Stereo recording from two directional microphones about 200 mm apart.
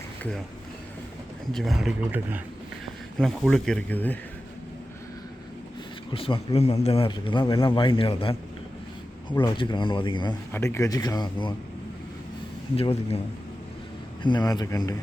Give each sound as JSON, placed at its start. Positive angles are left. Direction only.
{"t": 0.2, "sound": "speech", "side_deg": 5}
{"t": 1.5, "sound": "speech", "side_deg": 0}
{"t": 6.1, "sound": "a man's voice", "side_deg": 25}
{"t": 9.4, "sound": "a man's voice", "side_deg": 25}
{"t": 10.5, "sound": "speech", "side_deg": 10}
{"t": 12.7, "sound": "a man's voice", "side_deg": 30}
{"t": 14.2, "sound": "a man's voice", "side_deg": 20}